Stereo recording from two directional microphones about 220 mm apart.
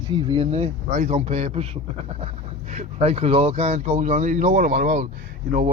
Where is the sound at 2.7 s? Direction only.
30° right (ahead or behind).